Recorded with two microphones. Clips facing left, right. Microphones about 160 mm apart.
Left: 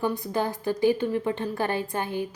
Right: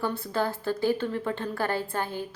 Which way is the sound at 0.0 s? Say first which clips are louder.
Left 2 dB; 15° left (ahead or behind).